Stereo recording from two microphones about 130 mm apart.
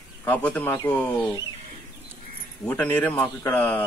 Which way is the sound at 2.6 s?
10° left (ahead or behind).